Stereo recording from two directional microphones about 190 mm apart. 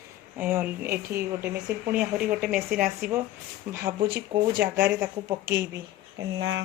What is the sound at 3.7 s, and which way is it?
Speech, 15° right (ahead or behind).